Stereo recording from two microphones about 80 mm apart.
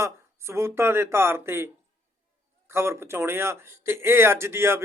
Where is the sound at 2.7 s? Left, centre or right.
Right.